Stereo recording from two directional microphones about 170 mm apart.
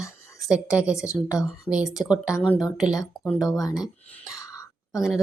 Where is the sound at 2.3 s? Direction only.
15° left (ahead or behind).